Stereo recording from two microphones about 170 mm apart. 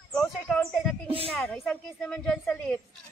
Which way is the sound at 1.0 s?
35° right (ahead or behind).